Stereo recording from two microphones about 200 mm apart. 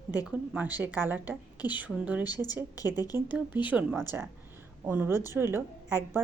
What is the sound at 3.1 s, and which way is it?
A woman's voice, 10° right (ahead or behind).